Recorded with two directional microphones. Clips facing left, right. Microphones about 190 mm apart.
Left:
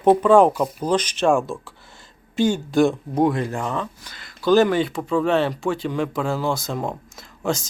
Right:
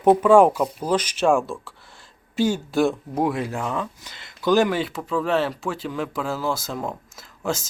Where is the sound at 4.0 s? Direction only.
20° right (ahead or behind).